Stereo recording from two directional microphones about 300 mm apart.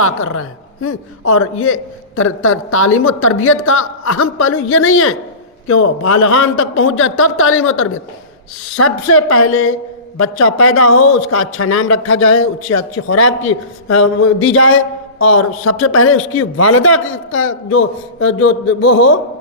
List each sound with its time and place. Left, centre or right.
0.0 s a man's voice: left